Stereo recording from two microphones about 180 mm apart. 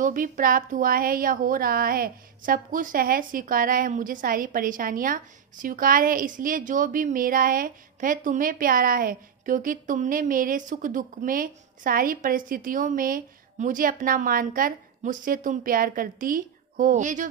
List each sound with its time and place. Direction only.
0.0 s a woman's voice: 50° right (ahead or behind)